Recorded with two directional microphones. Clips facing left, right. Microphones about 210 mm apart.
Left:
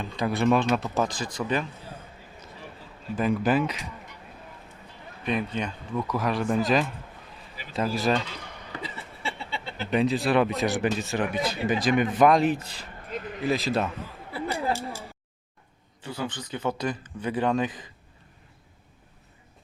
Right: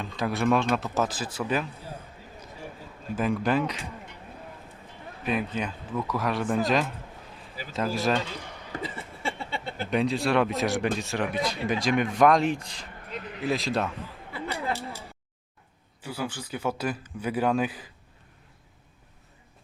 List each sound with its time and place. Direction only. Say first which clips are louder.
0.0 s speech: left 2 dB; centre (ahead or behind)
3.2 s speech: left 2 dB; centre (ahead or behind)
5.2 s speech: even; 5° right (ahead or behind)
8.8 s chuckle: right 3 dB; 50° right (ahead or behind)
9.9 s speech: left 2 dB; centre (ahead or behind)
14.3 s a sound: left 3 dB; 40° left (ahead or behind)
16.0 s speech: even; 10° right (ahead or behind)